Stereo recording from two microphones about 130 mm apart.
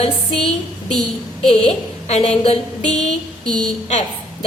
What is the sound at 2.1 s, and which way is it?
Speech, 50° left (ahead or behind).